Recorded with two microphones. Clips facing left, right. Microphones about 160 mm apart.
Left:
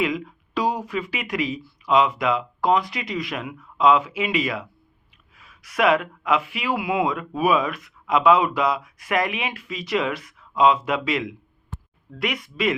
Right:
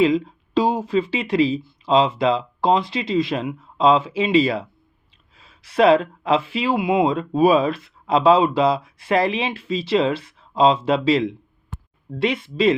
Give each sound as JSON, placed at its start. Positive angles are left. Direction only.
{"t": 0.0, "sound": "speech", "side_deg": -30}